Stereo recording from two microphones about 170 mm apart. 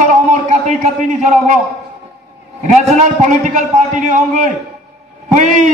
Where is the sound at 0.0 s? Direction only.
45° right (ahead or behind).